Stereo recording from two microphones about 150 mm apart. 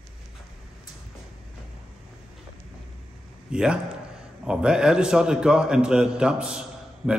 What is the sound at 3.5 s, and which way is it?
A man's voice, 5° right (ahead or behind).